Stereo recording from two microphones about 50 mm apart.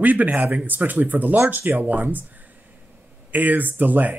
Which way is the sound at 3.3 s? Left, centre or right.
Right.